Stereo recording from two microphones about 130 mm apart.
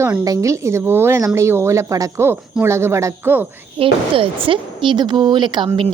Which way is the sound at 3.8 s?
45° right (ahead or behind).